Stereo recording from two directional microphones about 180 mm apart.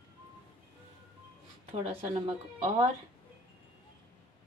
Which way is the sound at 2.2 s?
30° right (ahead or behind).